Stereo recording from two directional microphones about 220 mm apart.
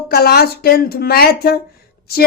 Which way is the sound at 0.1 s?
45° left (ahead or behind).